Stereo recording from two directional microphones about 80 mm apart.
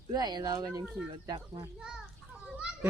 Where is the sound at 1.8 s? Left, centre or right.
Centre.